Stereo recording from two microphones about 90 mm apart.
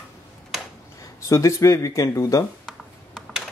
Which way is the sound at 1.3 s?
35° left (ahead or behind).